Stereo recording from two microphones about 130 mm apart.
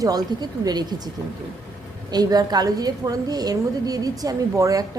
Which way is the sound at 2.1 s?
30° right (ahead or behind).